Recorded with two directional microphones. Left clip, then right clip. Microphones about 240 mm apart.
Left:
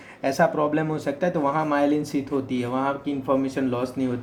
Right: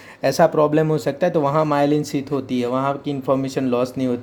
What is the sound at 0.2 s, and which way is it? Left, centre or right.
A man's voice, right.